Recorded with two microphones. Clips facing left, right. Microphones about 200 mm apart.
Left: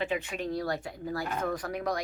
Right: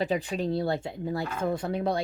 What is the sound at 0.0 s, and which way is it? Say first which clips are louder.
Speech: right 4 dB; 35° right (ahead or behind).